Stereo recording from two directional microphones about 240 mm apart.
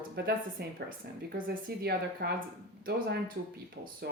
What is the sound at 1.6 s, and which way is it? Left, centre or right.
Speech, right.